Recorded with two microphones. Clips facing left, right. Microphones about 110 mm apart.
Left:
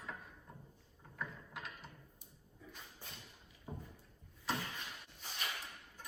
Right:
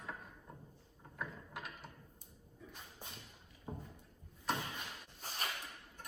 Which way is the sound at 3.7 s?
15° right (ahead or behind).